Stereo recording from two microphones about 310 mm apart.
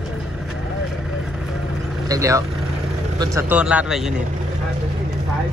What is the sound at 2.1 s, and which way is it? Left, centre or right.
Speech, centre.